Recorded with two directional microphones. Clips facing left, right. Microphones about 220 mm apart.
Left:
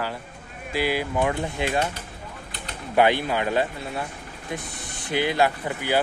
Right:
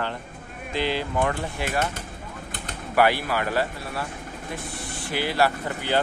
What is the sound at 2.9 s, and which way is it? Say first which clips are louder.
Speech: left 1 dB; 20° left (ahead or behind).